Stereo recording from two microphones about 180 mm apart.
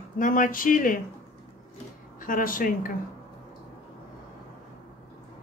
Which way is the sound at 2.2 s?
50° left (ahead or behind).